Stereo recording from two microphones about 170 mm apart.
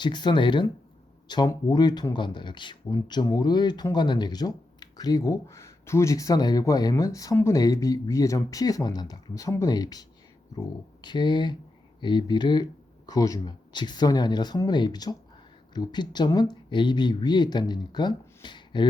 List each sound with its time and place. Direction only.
0.0 s speech: 25° left (ahead or behind)